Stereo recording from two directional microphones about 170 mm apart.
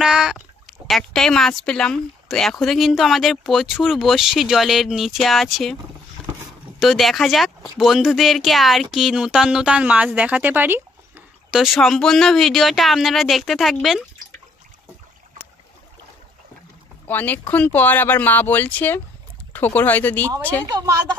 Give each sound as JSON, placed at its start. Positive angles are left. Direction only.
{"t": 0.0, "sound": "a sound", "side_deg": -5}
{"t": 0.8, "sound": "speech", "side_deg": 0}
{"t": 6.8, "sound": "speech", "side_deg": 0}
{"t": 11.6, "sound": "speech", "side_deg": 0}
{"t": 17.1, "sound": "speech", "side_deg": 10}
{"t": 20.2, "sound": "speech", "side_deg": -20}